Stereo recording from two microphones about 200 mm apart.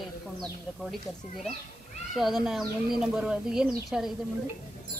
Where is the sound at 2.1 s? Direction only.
Centre (ahead or behind).